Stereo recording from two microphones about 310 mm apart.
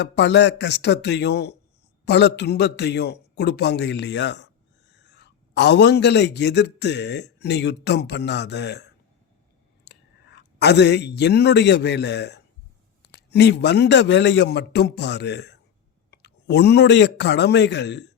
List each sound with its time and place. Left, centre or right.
0.0 s a man's voice: left